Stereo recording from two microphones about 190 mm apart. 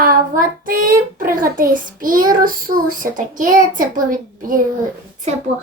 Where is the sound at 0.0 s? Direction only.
50° right (ahead or behind).